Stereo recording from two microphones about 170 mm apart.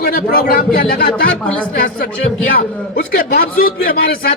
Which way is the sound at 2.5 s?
55° left (ahead or behind).